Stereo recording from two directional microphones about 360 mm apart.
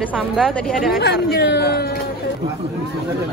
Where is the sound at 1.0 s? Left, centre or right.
Left.